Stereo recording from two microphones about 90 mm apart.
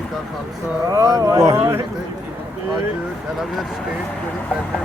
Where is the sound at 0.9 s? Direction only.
45° right (ahead or behind); by 1.8 s 30° right (ahead or behind).